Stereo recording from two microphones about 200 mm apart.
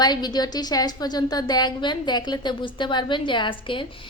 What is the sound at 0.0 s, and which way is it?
A woman's voice, 20° left (ahead or behind).